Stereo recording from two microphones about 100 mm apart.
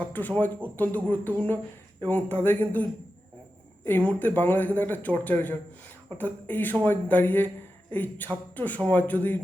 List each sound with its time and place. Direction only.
0.0 s speech: 15° left (ahead or behind)
3.8 s speech: 20° left (ahead or behind)